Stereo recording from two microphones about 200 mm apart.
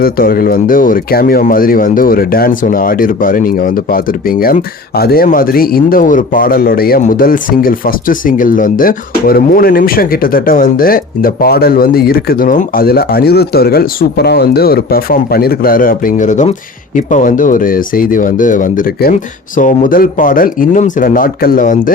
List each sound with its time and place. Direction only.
0.0 s speech: 50° left (ahead or behind)